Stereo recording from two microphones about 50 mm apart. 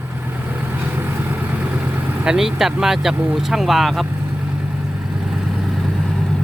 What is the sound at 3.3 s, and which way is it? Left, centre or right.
Speech, centre.